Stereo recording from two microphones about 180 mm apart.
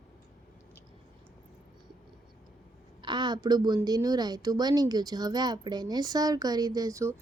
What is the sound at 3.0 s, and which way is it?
A woman's voice, 25° right (ahead or behind).